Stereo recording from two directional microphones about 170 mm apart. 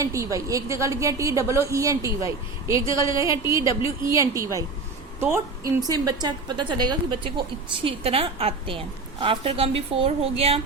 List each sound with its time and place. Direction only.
0.0 s a woman's voice: 20° right (ahead or behind); by 10.6 s 35° right (ahead or behind)